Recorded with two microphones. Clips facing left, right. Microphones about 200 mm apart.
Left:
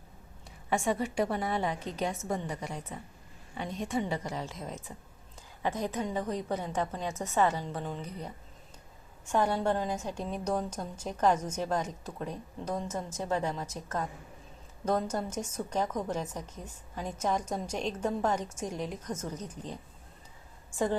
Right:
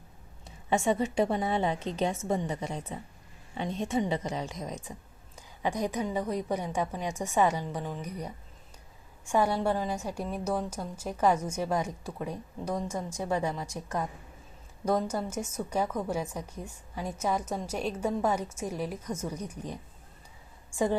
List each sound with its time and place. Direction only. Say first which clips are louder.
0.4 s a woman's voice: right 3 dB; 20° right (ahead or behind)